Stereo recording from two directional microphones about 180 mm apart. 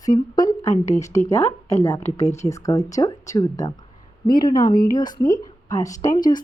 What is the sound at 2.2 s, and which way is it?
Speech, 40° left (ahead or behind).